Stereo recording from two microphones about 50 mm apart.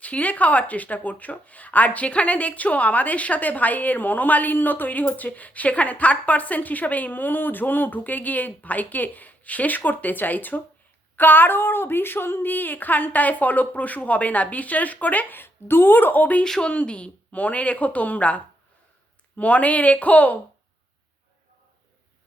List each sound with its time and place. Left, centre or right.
0.0 s speech: left
16.4 s speech: centre